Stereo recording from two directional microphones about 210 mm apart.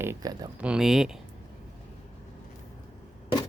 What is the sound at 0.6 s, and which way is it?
Speech, 5° right (ahead or behind).